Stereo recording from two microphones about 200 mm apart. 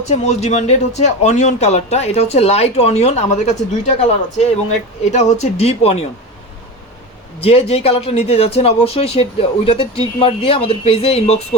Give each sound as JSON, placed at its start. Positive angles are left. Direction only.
{"t": 0.1, "sound": "speech", "side_deg": 30}
{"t": 7.4, "sound": "speech", "side_deg": 30}